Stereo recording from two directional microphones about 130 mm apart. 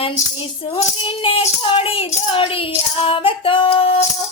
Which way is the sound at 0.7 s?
45° left (ahead or behind).